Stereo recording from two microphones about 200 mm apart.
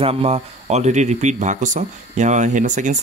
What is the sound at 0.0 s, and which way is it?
Speech, 30° right (ahead or behind).